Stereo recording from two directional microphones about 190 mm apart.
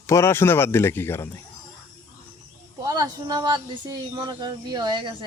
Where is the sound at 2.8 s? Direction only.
20° right (ahead or behind).